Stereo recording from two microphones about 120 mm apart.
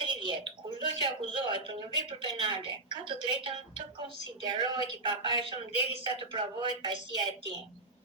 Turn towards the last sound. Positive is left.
turn(degrees=-40)  # may be behind; listen again after turning